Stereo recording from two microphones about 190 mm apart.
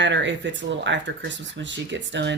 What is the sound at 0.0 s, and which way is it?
Speech, 70° right (ahead or behind).